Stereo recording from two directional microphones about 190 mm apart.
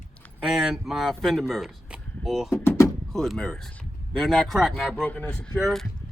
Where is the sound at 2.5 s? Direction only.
15° left (ahead or behind).